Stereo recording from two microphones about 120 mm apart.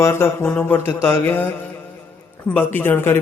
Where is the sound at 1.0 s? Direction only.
20° left (ahead or behind).